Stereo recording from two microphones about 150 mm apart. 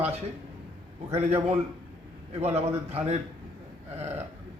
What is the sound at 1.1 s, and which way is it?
A man's voice, 45° right (ahead or behind).